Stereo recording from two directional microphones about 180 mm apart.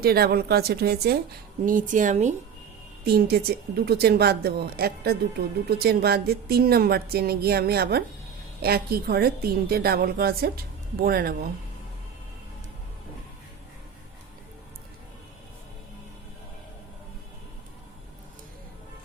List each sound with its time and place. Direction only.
0.0 s speech: 60° right (ahead or behind)
1.6 s speech: 45° right (ahead or behind)
3.0 s speech: 60° right (ahead or behind)